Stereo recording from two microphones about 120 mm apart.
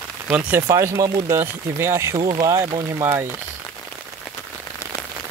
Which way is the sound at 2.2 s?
40° right (ahead or behind).